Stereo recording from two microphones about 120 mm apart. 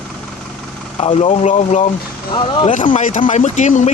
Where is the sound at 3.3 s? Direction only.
75° left (ahead or behind).